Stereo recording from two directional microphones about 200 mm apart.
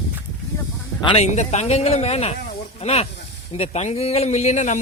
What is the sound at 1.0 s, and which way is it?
A man's voice, 30° left (ahead or behind).